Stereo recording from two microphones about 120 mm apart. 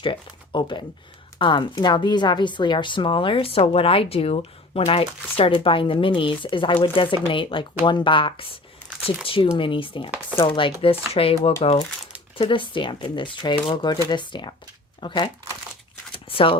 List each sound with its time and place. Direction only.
0.0 s a woman's voice: 45° left (ahead or behind)
16.1 s shuffling cards: 45° left (ahead or behind)